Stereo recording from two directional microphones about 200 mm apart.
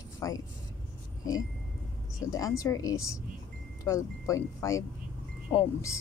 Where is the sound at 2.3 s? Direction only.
15° left (ahead or behind).